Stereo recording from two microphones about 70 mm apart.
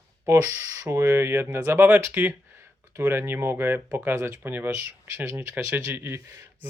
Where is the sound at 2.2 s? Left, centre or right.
Right.